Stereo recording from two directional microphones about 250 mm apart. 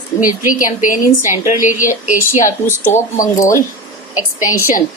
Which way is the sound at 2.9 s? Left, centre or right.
Left.